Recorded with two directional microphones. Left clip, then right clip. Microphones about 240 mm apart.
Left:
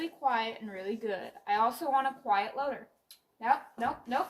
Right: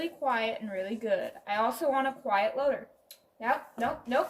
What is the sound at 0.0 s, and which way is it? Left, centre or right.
A woman's voice, centre.